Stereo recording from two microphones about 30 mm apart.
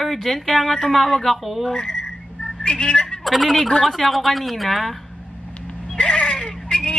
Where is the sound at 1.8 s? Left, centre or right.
Left.